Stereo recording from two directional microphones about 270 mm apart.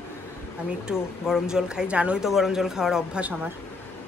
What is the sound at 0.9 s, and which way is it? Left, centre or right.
A woman's voice, centre.